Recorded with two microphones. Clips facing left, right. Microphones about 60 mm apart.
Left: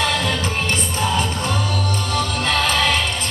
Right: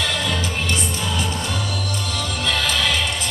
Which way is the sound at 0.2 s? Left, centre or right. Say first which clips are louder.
Left 2 dB; left.